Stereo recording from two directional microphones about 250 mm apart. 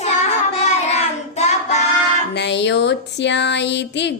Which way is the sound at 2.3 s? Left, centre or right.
Left.